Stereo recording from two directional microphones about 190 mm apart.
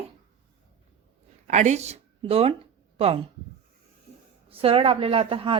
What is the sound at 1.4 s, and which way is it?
Speech, 40° right (ahead or behind).